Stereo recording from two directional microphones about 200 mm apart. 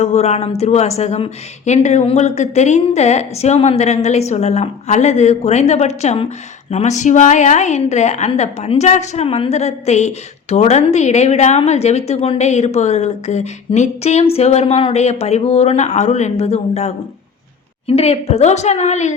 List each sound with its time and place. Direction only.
0.0 s a woman's voice: 35° left (ahead or behind)